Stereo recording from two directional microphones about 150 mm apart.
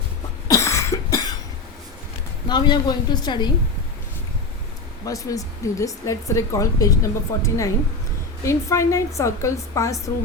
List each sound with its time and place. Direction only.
0.4 s cough: 20° left (ahead or behind)
2.5 s speech: 30° left (ahead or behind)
5.0 s speech: 25° left (ahead or behind)